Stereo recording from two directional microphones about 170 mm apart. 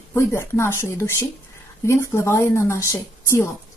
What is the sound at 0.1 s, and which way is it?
A woman's voice, 15° left (ahead or behind).